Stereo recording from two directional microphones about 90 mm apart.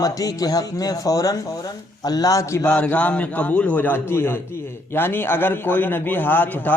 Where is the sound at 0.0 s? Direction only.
45° left (ahead or behind).